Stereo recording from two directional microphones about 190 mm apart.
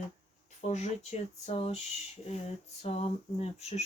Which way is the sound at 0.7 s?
35° left (ahead or behind).